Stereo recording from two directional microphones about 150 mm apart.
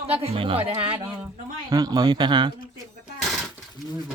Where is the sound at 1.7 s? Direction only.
25° right (ahead or behind).